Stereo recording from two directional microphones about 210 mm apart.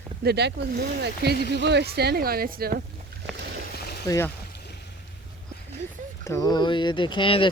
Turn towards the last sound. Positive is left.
turn(degrees=25)  # may be behind; listen again after turning